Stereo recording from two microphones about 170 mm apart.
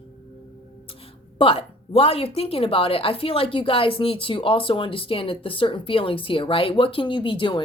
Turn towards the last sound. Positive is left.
turn(degrees=30)  # may be behind; listen again after turning